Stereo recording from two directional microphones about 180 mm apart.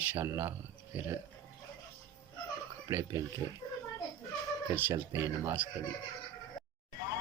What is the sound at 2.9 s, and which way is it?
Speech, 15° right (ahead or behind).